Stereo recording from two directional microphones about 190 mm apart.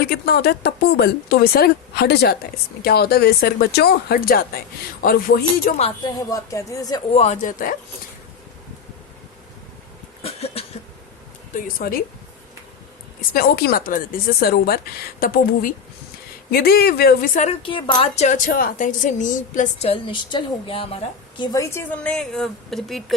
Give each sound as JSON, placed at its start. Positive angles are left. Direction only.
{"t": 0.1, "sound": "speech", "side_deg": 55}
{"t": 6.0, "sound": "a woman's voice", "side_deg": 20}
{"t": 7.1, "sound": "speech", "side_deg": 35}
{"t": 10.2, "sound": "cough", "side_deg": 30}
{"t": 11.5, "sound": "speech", "side_deg": 50}
{"t": 13.3, "sound": "speech", "side_deg": 50}
{"t": 17.3, "sound": "a woman's voice", "side_deg": 35}